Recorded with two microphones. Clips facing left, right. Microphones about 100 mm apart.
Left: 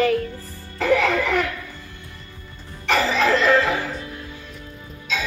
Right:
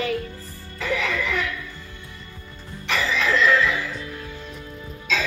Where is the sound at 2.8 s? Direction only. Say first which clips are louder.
Left 5 dB; 45° left (ahead or behind).